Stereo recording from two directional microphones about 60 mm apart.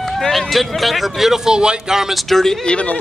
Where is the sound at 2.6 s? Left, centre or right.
Left.